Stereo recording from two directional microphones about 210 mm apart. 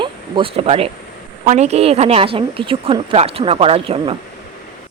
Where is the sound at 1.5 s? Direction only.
30° right (ahead or behind).